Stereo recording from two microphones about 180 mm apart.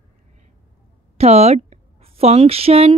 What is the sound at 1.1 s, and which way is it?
A woman's voice, 35° right (ahead or behind).